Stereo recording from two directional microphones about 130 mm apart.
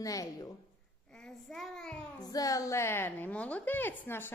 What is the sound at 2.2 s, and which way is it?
A woman's voice, 30° left (ahead or behind).